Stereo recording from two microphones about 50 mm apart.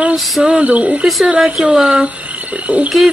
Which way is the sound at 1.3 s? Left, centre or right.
Centre.